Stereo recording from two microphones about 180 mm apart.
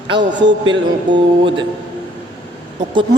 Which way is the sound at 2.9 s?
25° right (ahead or behind).